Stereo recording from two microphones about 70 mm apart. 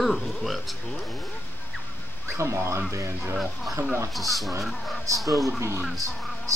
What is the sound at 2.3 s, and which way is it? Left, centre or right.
Speech, right.